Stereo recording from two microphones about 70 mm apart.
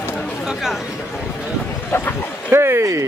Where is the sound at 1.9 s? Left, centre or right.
Left.